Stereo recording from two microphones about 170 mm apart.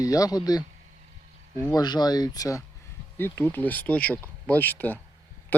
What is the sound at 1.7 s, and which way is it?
Speech, 25° left (ahead or behind).